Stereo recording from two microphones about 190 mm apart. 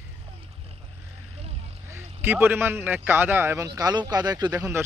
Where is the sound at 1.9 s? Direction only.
10° right (ahead or behind).